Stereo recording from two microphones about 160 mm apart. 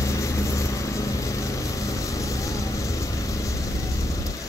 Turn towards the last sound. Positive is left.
turn(degrees=20)  # may be behind; listen again after turning